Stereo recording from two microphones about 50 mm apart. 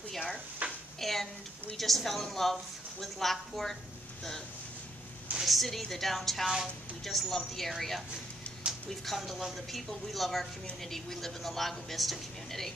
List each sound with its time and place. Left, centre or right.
0.6 s a sound: right
0.9 s a woman's voice: centre
5.3 s a woman's voice: centre
9.0 s a woman's voice: centre